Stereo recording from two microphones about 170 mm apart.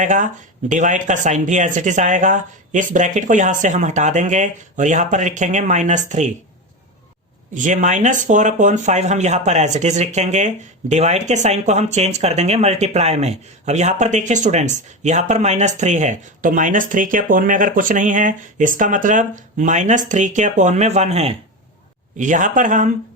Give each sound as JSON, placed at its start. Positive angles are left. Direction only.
{"t": 0.0, "sound": "speech", "side_deg": -45}
{"t": 7.5, "sound": "speech", "side_deg": -45}